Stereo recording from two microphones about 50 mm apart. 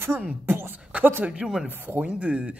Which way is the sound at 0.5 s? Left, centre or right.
Right.